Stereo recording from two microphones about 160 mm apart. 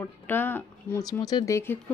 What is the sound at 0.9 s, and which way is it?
Speech, 25° left (ahead or behind).